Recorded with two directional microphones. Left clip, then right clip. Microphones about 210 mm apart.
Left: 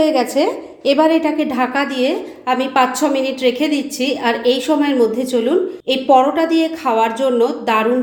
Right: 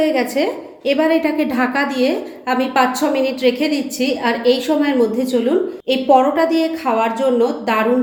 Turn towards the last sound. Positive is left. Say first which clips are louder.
# left 1 dB
turn(degrees=15)  # may be behind; listen again after turning